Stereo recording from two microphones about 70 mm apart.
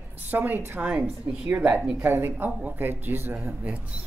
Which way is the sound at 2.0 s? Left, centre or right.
Right.